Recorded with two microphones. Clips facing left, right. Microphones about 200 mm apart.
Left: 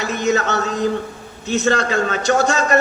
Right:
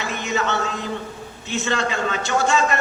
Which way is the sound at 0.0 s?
40° left (ahead or behind).